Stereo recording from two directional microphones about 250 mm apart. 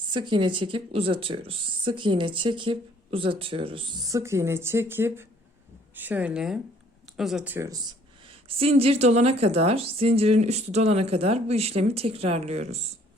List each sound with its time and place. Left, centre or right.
0.1 s speech: centre
8.4 s speech: right